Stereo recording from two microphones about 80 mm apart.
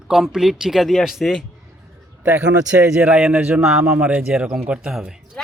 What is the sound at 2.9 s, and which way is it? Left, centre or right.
A man's voice, centre.